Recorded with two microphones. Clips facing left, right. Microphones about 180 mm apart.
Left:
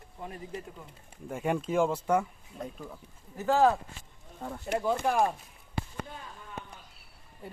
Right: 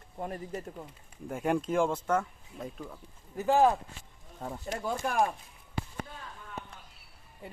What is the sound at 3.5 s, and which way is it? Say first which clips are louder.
Speech: even; 15° right (ahead or behind).